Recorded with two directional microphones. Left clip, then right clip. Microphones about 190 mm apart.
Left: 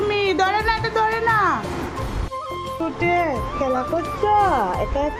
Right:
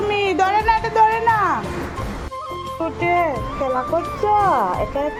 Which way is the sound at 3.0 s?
10° left (ahead or behind).